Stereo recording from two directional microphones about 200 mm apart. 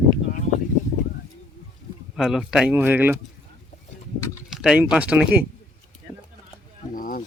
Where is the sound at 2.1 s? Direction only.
Centre (ahead or behind).